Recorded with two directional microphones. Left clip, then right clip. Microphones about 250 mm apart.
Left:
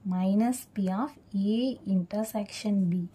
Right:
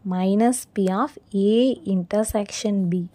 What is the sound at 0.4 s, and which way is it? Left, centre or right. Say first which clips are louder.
A woman's voice: right 9 dB; centre.